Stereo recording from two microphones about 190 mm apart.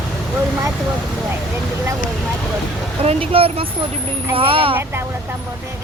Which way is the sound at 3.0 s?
30° right (ahead or behind).